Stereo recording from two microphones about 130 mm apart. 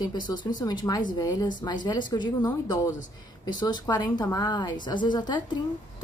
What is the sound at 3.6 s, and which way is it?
Speech, 30° left (ahead or behind).